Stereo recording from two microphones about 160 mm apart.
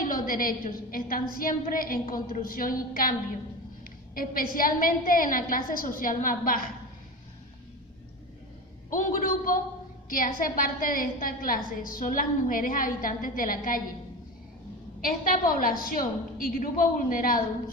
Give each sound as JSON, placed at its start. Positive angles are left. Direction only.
{"t": 0.0, "sound": "a woman's voice", "side_deg": 60}
{"t": 8.9, "sound": "a woman's voice", "side_deg": 55}
{"t": 15.0, "sound": "a woman's voice", "side_deg": 60}